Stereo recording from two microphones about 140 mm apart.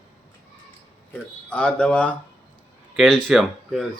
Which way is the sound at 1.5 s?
5° left (ahead or behind).